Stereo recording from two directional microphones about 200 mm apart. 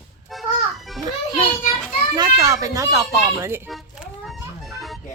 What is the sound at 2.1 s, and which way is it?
Speech, 20° right (ahead or behind).